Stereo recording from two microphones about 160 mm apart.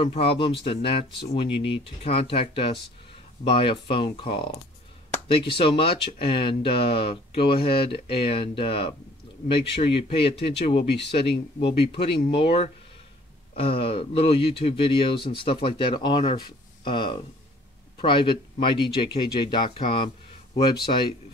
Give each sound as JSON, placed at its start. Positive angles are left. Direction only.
{"t": 0.0, "sound": "speech", "side_deg": 35}